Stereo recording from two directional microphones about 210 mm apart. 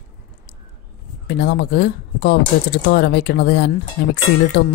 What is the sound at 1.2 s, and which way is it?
Speech, 55° left (ahead or behind).